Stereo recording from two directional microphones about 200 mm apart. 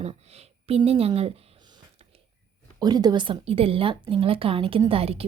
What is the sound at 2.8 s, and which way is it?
Speech, 20° right (ahead or behind).